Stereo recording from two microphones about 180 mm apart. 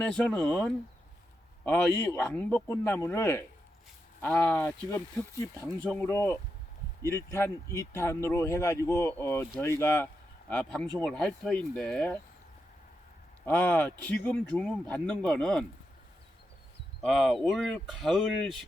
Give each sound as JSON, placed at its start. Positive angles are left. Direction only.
{"t": 0.1, "sound": "speech", "side_deg": 5}
{"t": 13.4, "sound": "speech", "side_deg": 10}
{"t": 17.0, "sound": "speech", "side_deg": 0}